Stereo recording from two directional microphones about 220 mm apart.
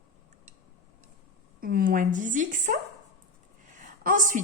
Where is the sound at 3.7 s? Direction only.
35° right (ahead or behind).